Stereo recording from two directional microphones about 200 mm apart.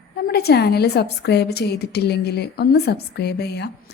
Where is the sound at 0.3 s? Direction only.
55° left (ahead or behind).